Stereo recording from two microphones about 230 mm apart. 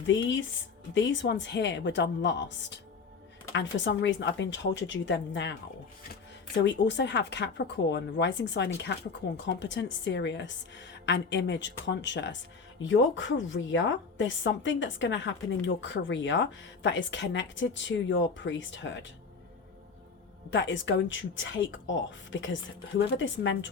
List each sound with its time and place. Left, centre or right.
0.1 s a woman's voice: left
6.7 s a woman's voice: left
20.5 s a woman's voice: left